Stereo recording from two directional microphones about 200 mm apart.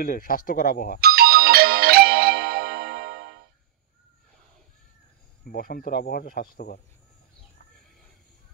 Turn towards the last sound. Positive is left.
turn(degrees=45)  # may be behind; listen again after turning